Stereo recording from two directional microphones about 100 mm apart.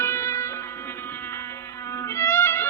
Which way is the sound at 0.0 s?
30° left (ahead or behind).